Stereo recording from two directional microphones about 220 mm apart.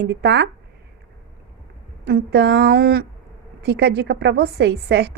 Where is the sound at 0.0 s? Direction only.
50° right (ahead or behind).